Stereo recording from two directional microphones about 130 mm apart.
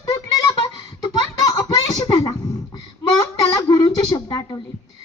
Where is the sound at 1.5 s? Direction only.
30° left (ahead or behind).